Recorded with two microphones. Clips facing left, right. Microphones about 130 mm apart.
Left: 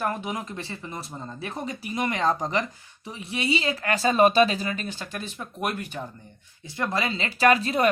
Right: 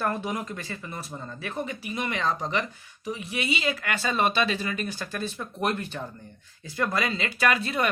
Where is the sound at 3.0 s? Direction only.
30° left (ahead or behind).